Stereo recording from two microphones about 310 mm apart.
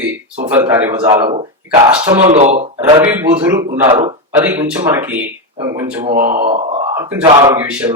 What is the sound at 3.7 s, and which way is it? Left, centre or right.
Speech, right.